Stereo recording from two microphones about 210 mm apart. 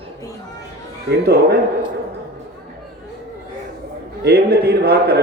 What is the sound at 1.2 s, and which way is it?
Speech, 50° right (ahead or behind).